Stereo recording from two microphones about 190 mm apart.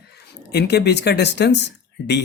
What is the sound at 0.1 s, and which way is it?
Speech, 60° left (ahead or behind).